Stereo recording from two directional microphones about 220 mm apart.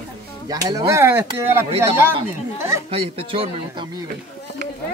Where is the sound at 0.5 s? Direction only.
15° right (ahead or behind).